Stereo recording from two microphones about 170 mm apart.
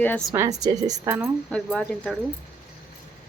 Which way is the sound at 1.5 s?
5° left (ahead or behind).